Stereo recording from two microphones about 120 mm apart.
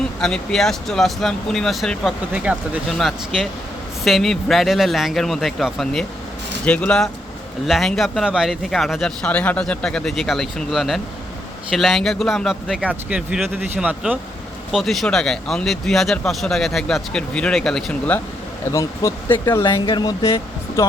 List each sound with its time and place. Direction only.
0.2 s speech: 5° left (ahead or behind)
18.6 s speech: 25° left (ahead or behind)
19.8 s speech: 40° left (ahead or behind)